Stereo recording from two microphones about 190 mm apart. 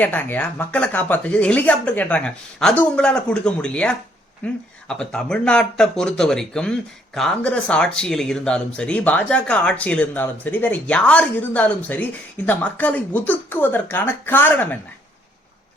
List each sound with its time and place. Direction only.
0.0 s speech: 10° left (ahead or behind)